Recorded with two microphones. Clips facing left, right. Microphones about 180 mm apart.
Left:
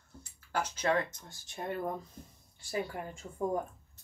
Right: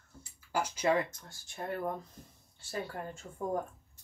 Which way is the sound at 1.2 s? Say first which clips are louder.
Left 1 dB; 20° left (ahead or behind).